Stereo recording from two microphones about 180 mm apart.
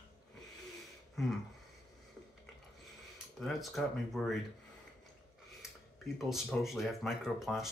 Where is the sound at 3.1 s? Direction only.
Centre (ahead or behind).